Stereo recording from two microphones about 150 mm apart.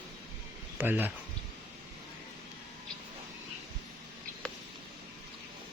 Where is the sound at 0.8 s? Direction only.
15° right (ahead or behind).